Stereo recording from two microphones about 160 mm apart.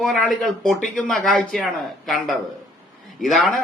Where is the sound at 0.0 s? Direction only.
Centre (ahead or behind).